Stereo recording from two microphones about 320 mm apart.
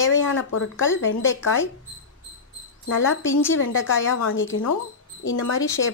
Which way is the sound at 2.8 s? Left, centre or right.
Left.